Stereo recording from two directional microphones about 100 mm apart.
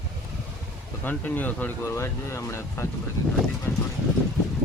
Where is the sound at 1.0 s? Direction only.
15° left (ahead or behind).